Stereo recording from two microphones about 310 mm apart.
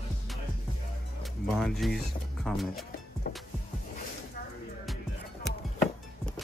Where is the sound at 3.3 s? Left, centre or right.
Left.